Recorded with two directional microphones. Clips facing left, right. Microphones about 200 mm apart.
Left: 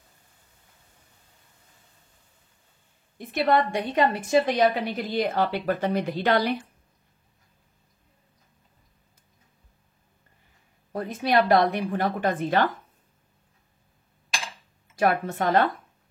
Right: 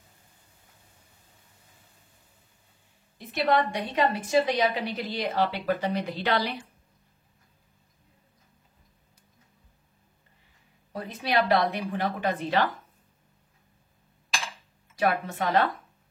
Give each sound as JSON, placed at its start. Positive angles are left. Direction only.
{"t": 3.2, "sound": "a woman's voice", "side_deg": 50}
{"t": 10.9, "sound": "a woman's voice", "side_deg": 45}
{"t": 15.0, "sound": "a woman's voice", "side_deg": 50}